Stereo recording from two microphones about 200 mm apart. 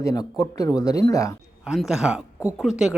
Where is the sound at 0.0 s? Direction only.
15° left (ahead or behind).